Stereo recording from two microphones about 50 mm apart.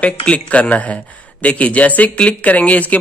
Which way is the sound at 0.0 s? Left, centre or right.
Left.